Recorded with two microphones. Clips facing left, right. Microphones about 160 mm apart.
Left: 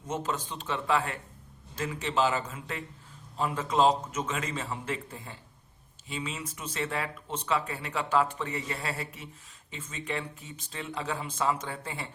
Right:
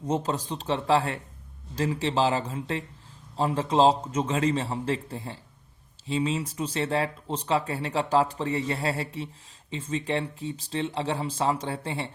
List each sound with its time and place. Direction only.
0.0 s speech: 35° right (ahead or behind)